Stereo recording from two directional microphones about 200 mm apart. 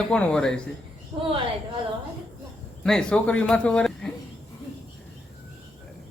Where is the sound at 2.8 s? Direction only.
5° left (ahead or behind).